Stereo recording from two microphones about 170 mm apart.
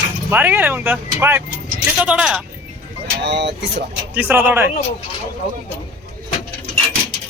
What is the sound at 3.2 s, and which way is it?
Speech, 90° right.